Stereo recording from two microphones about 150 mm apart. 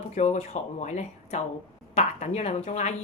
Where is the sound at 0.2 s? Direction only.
50° left (ahead or behind).